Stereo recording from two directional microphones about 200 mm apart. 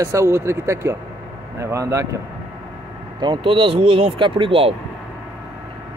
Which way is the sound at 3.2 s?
25° right (ahead or behind).